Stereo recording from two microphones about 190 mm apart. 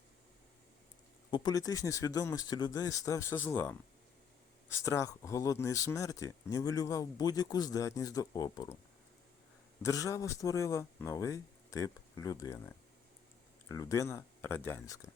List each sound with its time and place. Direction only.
1.3 s speech: 20° left (ahead or behind)
4.8 s speech: 15° left (ahead or behind)
9.8 s speech: 15° left (ahead or behind)